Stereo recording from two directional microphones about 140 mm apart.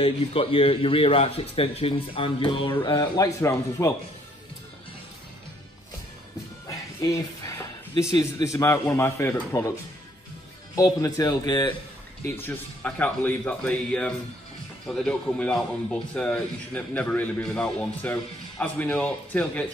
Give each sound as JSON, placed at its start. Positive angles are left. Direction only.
{"t": 0.0, "sound": "a man's voice", "side_deg": 40}
{"t": 7.0, "sound": "a sound", "side_deg": 20}
{"t": 8.2, "sound": "a man's voice", "side_deg": 20}
{"t": 10.8, "sound": "a man's voice", "side_deg": 25}
{"t": 12.4, "sound": "a man's voice", "side_deg": 10}